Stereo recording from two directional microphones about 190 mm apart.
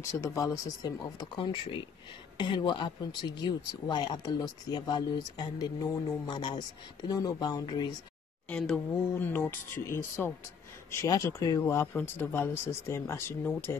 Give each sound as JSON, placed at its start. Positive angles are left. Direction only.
{"t": 0.2, "sound": "speech", "side_deg": 15}
{"t": 8.5, "sound": "speech", "side_deg": 5}